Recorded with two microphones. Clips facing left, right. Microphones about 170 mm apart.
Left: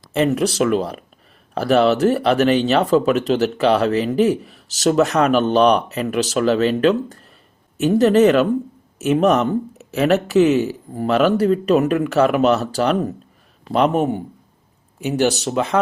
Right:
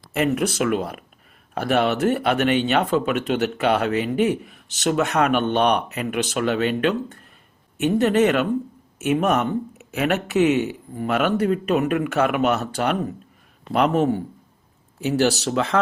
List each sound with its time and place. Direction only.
0.1 s speech: 30° left (ahead or behind)
13.7 s speech: 20° left (ahead or behind)